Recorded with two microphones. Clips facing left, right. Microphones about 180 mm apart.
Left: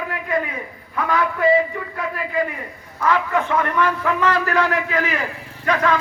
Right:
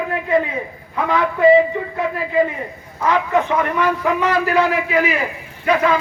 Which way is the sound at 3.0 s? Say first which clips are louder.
Right 2 dB; 20° right (ahead or behind).